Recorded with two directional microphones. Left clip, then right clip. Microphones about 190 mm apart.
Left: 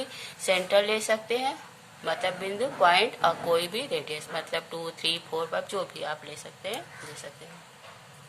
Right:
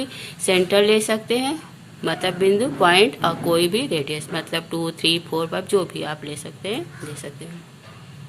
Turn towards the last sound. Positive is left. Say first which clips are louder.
# right 7 dB
turn(degrees=-10)  # may be behind; listen again after turning